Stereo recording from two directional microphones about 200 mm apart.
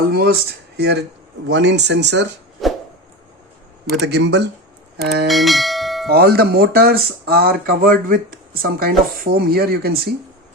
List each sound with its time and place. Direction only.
0.1 s speech: 50° right (ahead or behind)
3.9 s speech: 60° right (ahead or behind)
5.3 s bell: centre (ahead or behind)
6.1 s speech: 50° right (ahead or behind)